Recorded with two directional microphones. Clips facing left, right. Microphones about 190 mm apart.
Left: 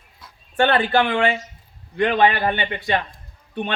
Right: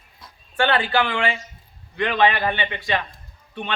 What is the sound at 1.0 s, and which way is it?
Speech, 40° left (ahead or behind).